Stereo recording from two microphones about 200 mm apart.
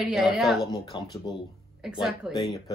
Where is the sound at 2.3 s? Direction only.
20° left (ahead or behind).